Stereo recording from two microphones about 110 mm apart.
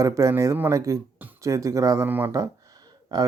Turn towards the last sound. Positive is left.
turn(degrees=-35)  # may be behind; listen again after turning